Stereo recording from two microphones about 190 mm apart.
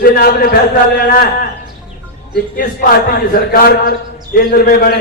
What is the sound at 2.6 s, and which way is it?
A man's voice, 50° left (ahead or behind).